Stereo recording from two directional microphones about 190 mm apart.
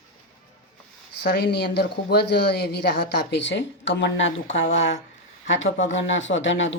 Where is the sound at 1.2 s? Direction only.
55° left (ahead or behind).